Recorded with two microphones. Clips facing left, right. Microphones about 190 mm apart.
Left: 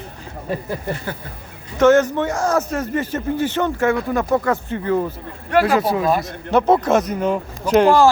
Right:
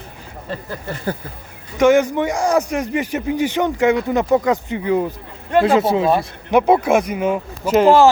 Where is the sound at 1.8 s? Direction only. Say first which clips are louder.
Even; 10° right (ahead or behind).